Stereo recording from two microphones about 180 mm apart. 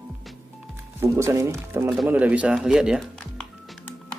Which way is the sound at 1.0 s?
15° right (ahead or behind).